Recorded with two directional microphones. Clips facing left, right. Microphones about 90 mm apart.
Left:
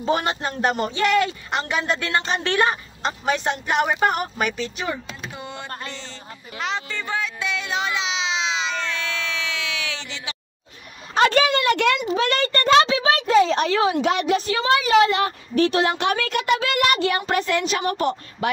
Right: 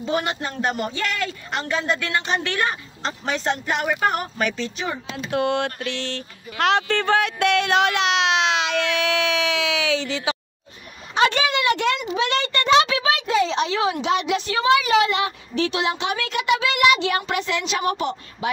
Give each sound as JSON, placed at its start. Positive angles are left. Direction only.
{"t": 0.0, "sound": "a man's voice", "side_deg": 35}
{"t": 2.0, "sound": "speech", "side_deg": 35}
{"t": 3.0, "sound": "a man's voice", "side_deg": 15}
{"t": 4.4, "sound": "speech", "side_deg": 10}
{"t": 5.1, "sound": "speech", "side_deg": -70}
{"t": 5.9, "sound": "a sound", "side_deg": -75}
{"t": 11.1, "sound": "a sound", "side_deg": 45}
{"t": 11.7, "sound": "a child's voice", "side_deg": 60}
{"t": 12.2, "sound": "speech", "side_deg": 45}
{"t": 12.8, "sound": "a sound", "side_deg": 30}
{"t": 14.0, "sound": "speech", "side_deg": 50}